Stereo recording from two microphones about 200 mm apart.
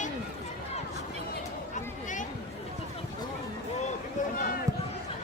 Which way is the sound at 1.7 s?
40° left (ahead or behind).